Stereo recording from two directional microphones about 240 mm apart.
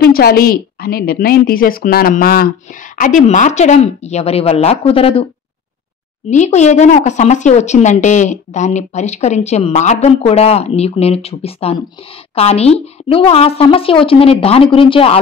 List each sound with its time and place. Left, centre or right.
0.0 s a woman's voice: left
6.3 s a woman's voice: left